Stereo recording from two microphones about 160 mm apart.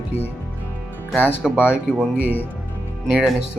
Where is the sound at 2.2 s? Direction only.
10° left (ahead or behind).